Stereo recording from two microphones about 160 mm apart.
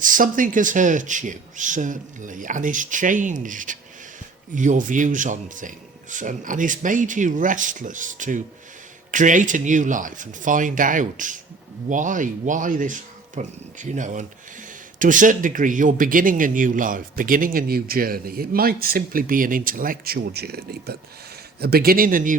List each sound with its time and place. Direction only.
0.0 s a man's voice: 55° right (ahead or behind); by 20.9 s 90° right
21.6 s speech: 75° right (ahead or behind); by 22.4 s 55° right (ahead or behind)